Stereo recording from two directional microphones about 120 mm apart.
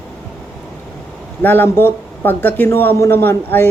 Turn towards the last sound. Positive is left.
turn(degrees=20)  # may be behind; listen again after turning